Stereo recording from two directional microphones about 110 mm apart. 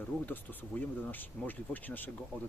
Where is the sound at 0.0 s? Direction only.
15° left (ahead or behind).